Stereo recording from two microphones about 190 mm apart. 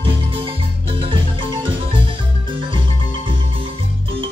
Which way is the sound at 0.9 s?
25° right (ahead or behind).